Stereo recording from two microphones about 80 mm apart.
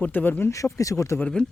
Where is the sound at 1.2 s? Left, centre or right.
Centre.